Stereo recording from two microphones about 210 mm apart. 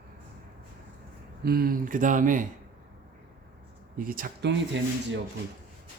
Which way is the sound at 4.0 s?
45° right (ahead or behind).